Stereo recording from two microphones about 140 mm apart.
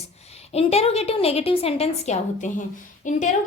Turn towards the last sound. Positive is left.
turn(degrees=65)  # may be behind; listen again after turning